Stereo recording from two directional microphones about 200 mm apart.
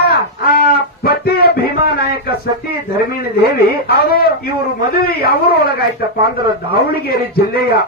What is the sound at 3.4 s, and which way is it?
Speech, 50° left (ahead or behind).